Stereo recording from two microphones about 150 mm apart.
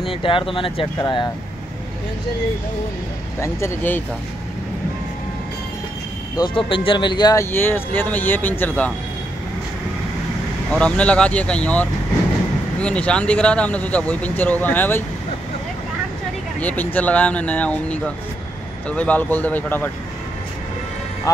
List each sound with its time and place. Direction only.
0.0 s speech: 35° left (ahead or behind)
3.3 s speech: 20° left (ahead or behind)
6.3 s speech: 30° left (ahead or behind)
7.5 s speech: 15° left (ahead or behind)
10.7 s speech: 5° left (ahead or behind)
16.5 s speech: 10° left (ahead or behind)